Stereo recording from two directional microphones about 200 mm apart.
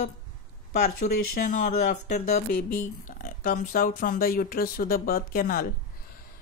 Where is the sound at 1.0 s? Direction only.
45° left (ahead or behind).